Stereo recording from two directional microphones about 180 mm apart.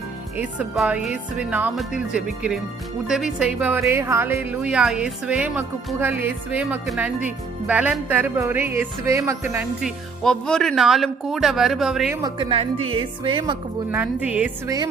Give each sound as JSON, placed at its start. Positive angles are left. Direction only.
{"t": 0.3, "sound": "a woman's voice", "side_deg": -10}
{"t": 10.2, "sound": "speech", "side_deg": 5}
{"t": 12.1, "sound": "a woman's voice", "side_deg": -20}
{"t": 13.9, "sound": "a woman's voice", "side_deg": -10}